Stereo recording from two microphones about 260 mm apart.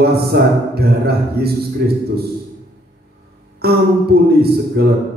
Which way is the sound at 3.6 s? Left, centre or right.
Right.